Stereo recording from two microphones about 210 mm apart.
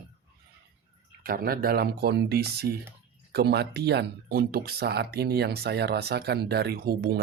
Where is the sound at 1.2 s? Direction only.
45° right (ahead or behind).